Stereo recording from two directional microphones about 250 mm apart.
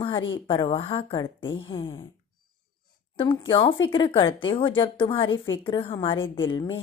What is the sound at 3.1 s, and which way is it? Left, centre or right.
A woman's voice, centre.